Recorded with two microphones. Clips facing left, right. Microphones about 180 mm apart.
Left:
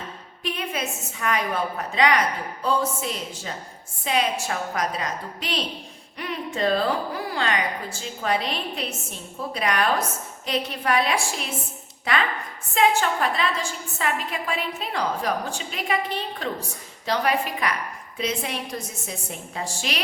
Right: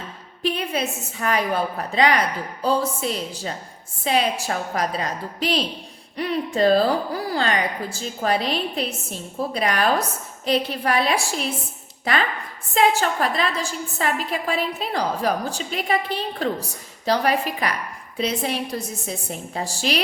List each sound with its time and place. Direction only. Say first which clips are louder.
0.4 s a woman's voice: right 5 dB; 35° right (ahead or behind)